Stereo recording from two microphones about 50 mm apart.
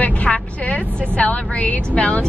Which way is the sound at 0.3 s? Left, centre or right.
Left.